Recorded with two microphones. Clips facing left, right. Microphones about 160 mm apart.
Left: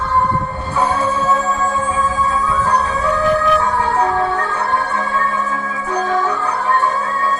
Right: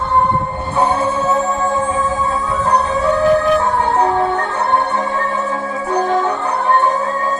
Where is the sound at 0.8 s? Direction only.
25° right (ahead or behind).